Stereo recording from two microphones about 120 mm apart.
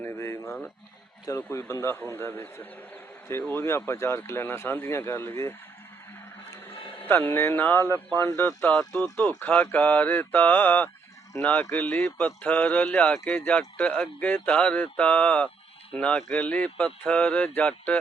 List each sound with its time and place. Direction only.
0.0 s a sound: 20° left (ahead or behind)
1.3 s speech: 25° left (ahead or behind)
7.0 s speech: 15° left (ahead or behind)